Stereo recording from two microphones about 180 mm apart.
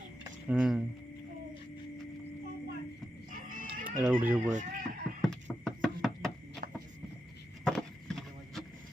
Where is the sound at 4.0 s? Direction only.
10° right (ahead or behind).